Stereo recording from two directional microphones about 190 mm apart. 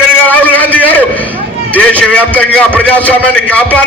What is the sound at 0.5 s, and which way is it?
A man's voice, 10° left (ahead or behind).